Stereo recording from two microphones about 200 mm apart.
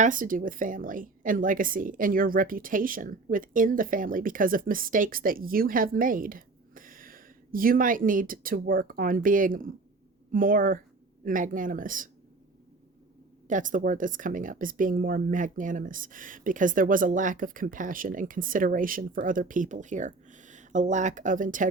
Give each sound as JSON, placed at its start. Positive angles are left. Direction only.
{"t": 0.0, "sound": "a woman's voice", "side_deg": -40}
{"t": 13.5, "sound": "speech", "side_deg": -40}